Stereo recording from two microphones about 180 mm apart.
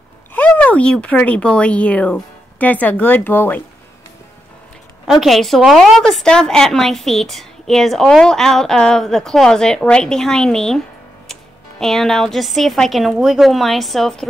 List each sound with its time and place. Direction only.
0.3 s speech: 10° left (ahead or behind)
5.0 s a woman's voice: centre (ahead or behind)
11.8 s a woman's voice: centre (ahead or behind)